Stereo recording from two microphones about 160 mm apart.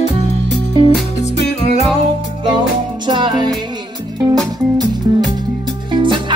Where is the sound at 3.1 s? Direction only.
25° right (ahead or behind).